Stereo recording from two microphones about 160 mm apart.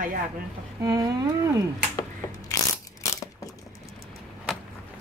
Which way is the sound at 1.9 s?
20° left (ahead or behind).